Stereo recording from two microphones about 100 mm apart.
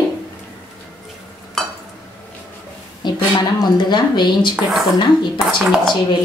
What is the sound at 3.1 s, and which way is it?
Speech, 45° left (ahead or behind).